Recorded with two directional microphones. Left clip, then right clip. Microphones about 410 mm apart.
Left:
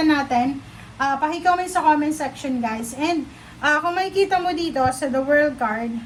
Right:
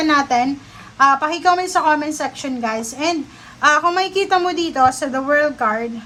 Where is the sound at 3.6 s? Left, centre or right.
Centre.